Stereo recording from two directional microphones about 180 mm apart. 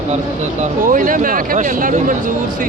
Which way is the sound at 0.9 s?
50° right (ahead or behind).